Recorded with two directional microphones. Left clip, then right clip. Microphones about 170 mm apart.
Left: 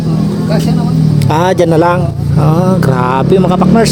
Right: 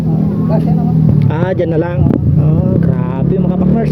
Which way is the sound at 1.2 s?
55° left (ahead or behind).